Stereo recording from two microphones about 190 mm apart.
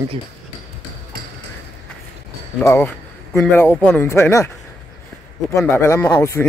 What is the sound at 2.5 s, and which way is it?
Speech, 10° left (ahead or behind).